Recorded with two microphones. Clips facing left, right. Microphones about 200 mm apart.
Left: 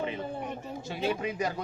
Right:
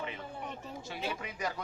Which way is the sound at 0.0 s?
30° left (ahead or behind).